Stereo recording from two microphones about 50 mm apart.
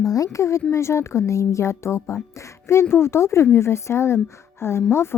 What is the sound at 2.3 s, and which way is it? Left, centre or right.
Speech, left.